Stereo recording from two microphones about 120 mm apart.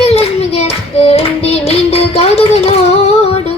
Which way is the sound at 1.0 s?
60° left (ahead or behind).